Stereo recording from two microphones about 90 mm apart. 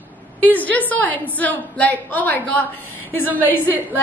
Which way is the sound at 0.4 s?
20° left (ahead or behind).